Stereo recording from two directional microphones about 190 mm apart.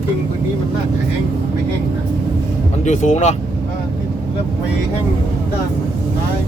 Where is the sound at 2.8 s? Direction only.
40° left (ahead or behind).